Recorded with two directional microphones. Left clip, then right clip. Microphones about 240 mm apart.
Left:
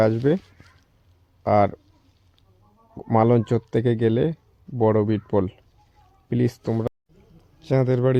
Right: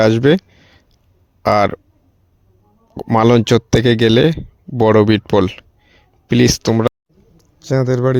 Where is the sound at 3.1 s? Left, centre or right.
Right.